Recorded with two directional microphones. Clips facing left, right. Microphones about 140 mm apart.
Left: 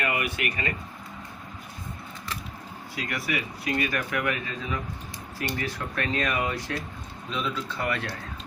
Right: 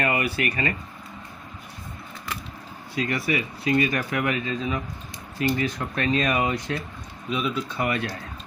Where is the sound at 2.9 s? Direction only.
25° right (ahead or behind).